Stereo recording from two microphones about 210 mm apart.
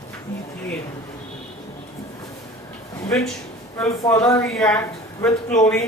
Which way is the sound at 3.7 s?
15° left (ahead or behind).